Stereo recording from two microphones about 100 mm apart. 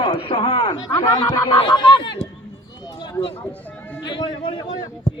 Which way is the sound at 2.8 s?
50° left (ahead or behind).